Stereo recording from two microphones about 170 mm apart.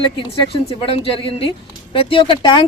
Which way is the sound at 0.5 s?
35° left (ahead or behind).